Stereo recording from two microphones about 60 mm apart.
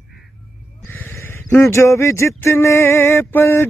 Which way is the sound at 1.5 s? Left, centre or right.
Left.